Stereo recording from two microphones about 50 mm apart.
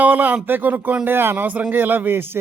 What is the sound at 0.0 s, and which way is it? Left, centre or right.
A man's voice, right.